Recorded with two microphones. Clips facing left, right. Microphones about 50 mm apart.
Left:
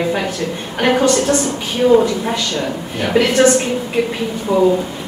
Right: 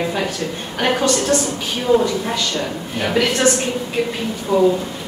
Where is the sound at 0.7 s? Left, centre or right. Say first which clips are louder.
Left 4 dB; centre.